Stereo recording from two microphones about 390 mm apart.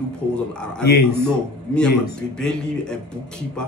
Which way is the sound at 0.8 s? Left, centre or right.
Left.